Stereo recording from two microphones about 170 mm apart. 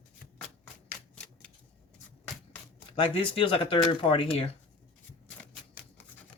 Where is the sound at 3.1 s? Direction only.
30° left (ahead or behind).